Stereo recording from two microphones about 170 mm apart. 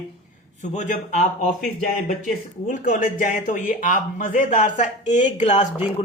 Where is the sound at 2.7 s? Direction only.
50° left (ahead or behind).